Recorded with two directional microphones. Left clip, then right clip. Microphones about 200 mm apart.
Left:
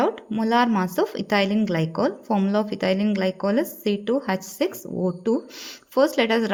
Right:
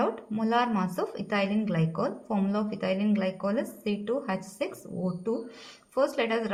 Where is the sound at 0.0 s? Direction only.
35° left (ahead or behind).